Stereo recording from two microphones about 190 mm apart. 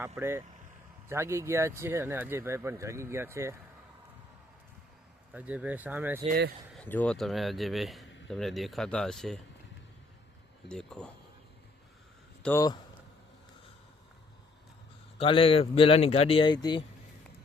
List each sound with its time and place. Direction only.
0.2 s speech: 10° right (ahead or behind)
5.3 s speech: 10° right (ahead or behind)
6.7 s speech: 10° left (ahead or behind)
10.7 s speech: 5° left (ahead or behind)
12.4 s speech: 10° left (ahead or behind)
15.2 s speech: 30° left (ahead or behind)